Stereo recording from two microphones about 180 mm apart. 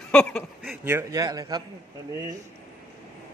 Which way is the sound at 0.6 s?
10° right (ahead or behind).